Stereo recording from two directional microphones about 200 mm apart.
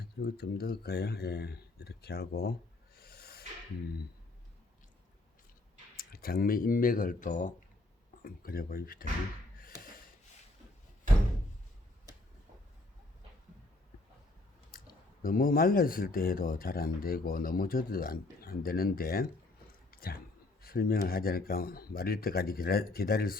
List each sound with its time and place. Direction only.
0.0 s speech: 55° left (ahead or behind)
6.0 s speech: 50° left (ahead or behind)
15.2 s speech: 45° left (ahead or behind)
19.9 s a sound: 50° left (ahead or behind)
20.6 s speech: 50° left (ahead or behind)